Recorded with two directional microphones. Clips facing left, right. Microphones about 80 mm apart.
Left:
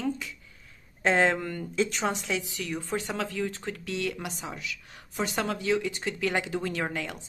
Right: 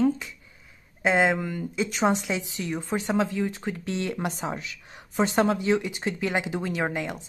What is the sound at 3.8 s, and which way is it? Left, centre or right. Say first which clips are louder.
Speech: right 3 dB; right.